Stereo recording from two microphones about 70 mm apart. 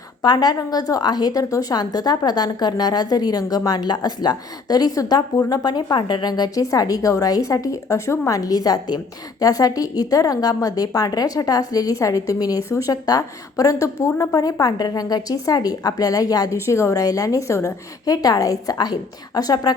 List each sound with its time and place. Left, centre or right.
0.2 s a woman's voice: left
5.5 s speech: left
6.6 s a woman's voice: left
8.4 s a woman's voice: left
12.6 s a woman's voice: left
14.3 s a woman's voice: left
16.6 s a woman's voice: left
16.9 s a woman's voice: left
18.0 s a woman's voice: left